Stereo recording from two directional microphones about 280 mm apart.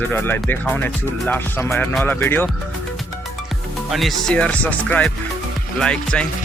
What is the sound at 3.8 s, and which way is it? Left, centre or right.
Speech, centre.